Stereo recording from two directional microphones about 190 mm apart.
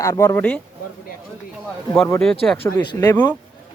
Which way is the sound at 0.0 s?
15° left (ahead or behind).